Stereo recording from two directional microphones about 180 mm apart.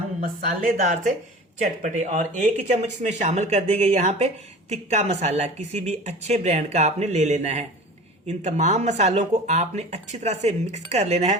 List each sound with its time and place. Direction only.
0.2 s a woman's voice: 45° right (ahead or behind)